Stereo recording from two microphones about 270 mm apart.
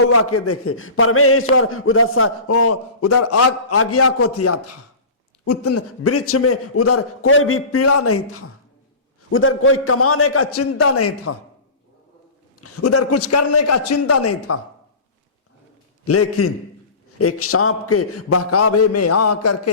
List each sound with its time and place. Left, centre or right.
0.1 s a man's voice: left
12.5 s a man's voice: left
16.0 s a man's voice: left